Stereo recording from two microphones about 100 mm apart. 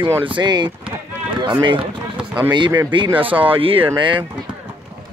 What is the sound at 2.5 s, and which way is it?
Speech, 50° right (ahead or behind).